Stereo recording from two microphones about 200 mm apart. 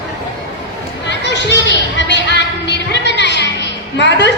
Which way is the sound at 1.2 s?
60° left (ahead or behind).